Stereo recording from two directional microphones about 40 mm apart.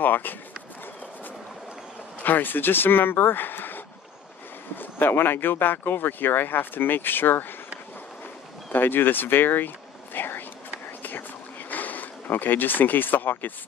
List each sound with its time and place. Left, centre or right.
0.0 s run: left
2.2 s speech: left
8.7 s speech: left
10.1 s whispering: left
11.7 s a sound: left